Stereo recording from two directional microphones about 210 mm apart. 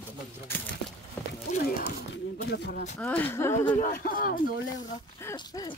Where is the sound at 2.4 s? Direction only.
50° left (ahead or behind).